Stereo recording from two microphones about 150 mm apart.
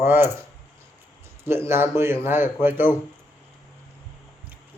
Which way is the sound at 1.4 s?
15° right (ahead or behind).